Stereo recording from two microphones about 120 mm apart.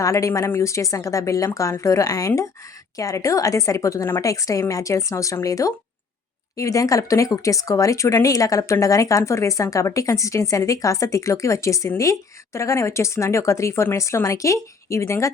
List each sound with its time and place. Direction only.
0.0 s speech: 25° left (ahead or behind)